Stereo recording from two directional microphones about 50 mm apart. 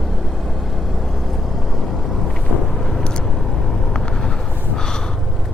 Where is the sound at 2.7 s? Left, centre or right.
Centre.